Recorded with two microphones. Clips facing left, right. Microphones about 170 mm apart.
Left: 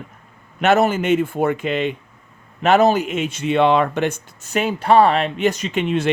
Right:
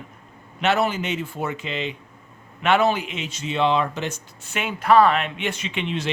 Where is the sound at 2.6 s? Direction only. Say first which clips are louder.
Left 5 dB; 40° left (ahead or behind); by 4.4 s 60° left (ahead or behind).